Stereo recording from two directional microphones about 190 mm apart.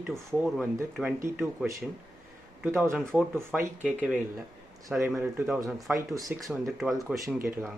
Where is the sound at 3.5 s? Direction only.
10° right (ahead or behind).